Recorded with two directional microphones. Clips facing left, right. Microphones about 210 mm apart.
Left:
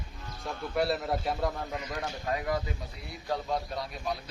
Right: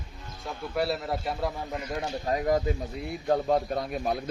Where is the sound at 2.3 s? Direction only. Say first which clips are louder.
Right 7 dB; 40° right (ahead or behind).